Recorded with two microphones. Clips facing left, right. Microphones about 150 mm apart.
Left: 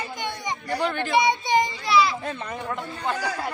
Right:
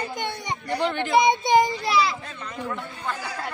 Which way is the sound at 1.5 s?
40° right (ahead or behind).